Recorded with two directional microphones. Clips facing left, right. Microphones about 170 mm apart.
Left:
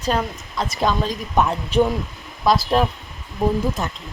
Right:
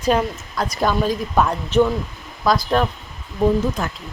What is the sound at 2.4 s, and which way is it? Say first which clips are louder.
Speech: left 1 dB; 5° left (ahead or behind).